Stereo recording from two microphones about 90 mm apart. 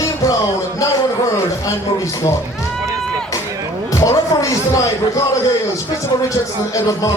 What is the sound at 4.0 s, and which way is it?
Speech, 40° left (ahead or behind).